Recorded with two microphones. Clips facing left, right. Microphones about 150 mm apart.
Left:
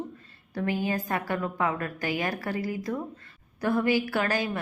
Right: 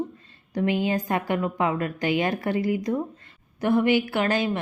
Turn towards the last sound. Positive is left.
turn(degrees=-20)  # may be behind; listen again after turning